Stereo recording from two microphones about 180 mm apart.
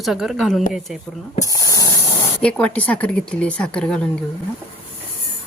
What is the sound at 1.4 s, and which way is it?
Speech, 20° left (ahead or behind).